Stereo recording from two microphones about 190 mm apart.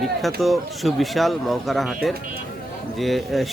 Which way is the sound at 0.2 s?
Centre (ahead or behind).